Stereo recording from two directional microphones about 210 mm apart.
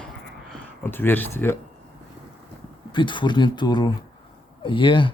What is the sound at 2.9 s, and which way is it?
Speech, 20° left (ahead or behind).